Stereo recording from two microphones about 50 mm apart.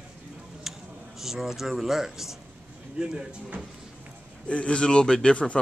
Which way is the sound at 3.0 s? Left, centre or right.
Right.